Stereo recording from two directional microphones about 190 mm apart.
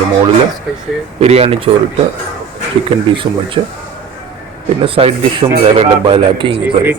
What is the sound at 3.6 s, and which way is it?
Speech, 25° right (ahead or behind).